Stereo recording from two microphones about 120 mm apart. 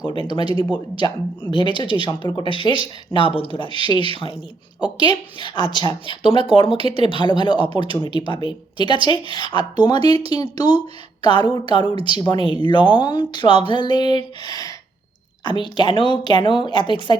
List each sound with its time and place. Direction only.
0.3 s a woman's voice: 40° left (ahead or behind)
5.4 s a woman's voice: 40° left (ahead or behind)
7.7 s speech: 50° right (ahead or behind)
8.3 s a woman's voice: 45° left (ahead or behind)
10.1 s speech: 55° right (ahead or behind)
10.3 s a woman's voice: 35° left (ahead or behind)